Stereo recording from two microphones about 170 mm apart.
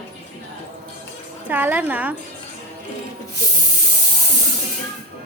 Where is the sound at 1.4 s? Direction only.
10° right (ahead or behind).